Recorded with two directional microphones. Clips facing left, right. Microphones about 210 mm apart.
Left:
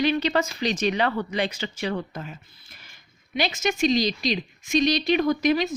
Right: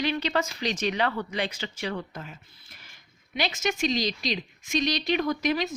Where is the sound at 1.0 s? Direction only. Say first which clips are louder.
Left 3 dB; 35° left (ahead or behind).